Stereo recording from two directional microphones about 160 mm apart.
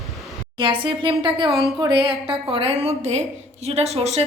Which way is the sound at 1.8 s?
30° right (ahead or behind).